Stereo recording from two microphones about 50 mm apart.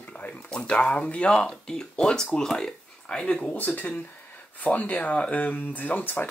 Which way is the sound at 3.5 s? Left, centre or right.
Left.